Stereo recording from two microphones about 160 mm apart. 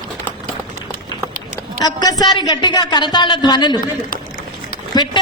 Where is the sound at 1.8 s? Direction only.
25° left (ahead or behind).